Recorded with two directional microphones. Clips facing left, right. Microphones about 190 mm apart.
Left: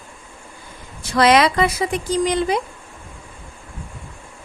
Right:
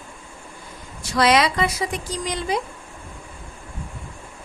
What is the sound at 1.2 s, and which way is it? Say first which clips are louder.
Speech: left 4 dB; 55° left (ahead or behind).